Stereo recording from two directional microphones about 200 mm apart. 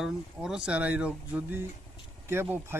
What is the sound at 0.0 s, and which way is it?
Speech, centre (ahead or behind).